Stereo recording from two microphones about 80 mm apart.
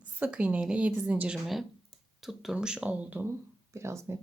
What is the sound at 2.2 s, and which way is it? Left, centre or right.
A woman's voice, centre.